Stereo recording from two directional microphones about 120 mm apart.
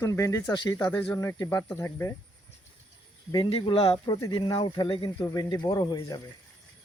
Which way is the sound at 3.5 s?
50° left (ahead or behind).